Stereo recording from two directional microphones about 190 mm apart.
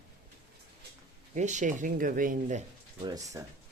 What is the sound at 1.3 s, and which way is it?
Speech, 40° right (ahead or behind).